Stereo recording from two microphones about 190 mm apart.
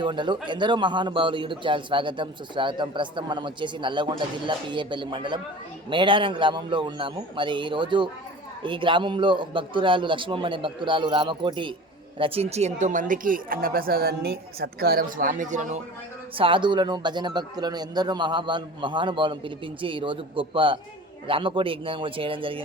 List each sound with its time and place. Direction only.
0.0 s a man's voice: 25° right (ahead or behind); by 15.8 s 40° right (ahead or behind)
16.4 s a man's voice: 25° right (ahead or behind)